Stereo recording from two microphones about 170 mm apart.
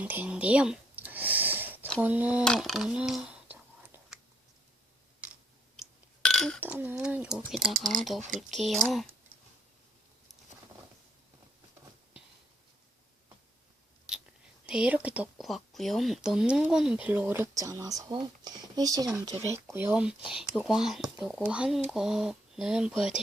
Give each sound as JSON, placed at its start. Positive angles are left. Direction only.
{"t": 0.0, "sound": "a sound", "side_deg": -10}
{"t": 2.0, "sound": "speech", "side_deg": -10}
{"t": 2.4, "sound": "whispering", "side_deg": 0}
{"t": 5.2, "sound": "a sound", "side_deg": -5}
{"t": 6.2, "sound": "burping", "side_deg": 5}
{"t": 6.6, "sound": "speech", "side_deg": -10}
{"t": 7.9, "sound": "speech", "side_deg": -50}
{"t": 8.4, "sound": "speech", "side_deg": 0}
{"t": 14.7, "sound": "speech", "side_deg": -5}
{"t": 19.7, "sound": "speech", "side_deg": -10}